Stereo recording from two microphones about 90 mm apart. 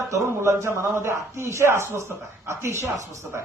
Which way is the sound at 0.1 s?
30° right (ahead or behind).